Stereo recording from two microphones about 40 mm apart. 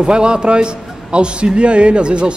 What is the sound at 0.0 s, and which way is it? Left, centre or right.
Speech, right.